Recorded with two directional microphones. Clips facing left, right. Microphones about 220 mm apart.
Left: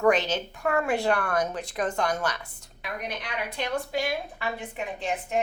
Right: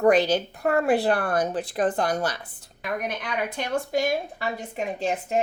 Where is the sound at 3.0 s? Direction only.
50° right (ahead or behind).